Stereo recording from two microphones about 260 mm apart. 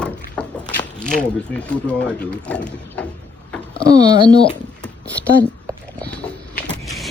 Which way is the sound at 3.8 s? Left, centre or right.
Centre.